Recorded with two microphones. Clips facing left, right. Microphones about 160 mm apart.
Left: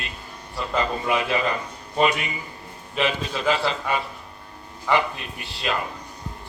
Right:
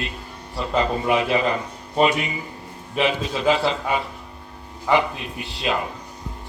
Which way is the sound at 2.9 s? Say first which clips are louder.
Right 3 dB; 15° right (ahead or behind).